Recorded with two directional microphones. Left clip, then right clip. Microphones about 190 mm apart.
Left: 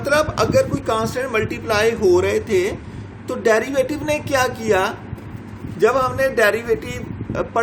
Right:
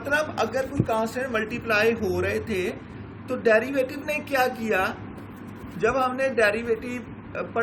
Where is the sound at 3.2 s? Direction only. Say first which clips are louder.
Left 4 dB; 55° left (ahead or behind).